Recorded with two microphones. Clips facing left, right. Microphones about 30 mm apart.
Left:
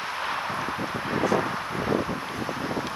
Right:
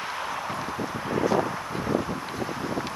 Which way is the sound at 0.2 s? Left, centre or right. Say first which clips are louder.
Left 2 dB; left.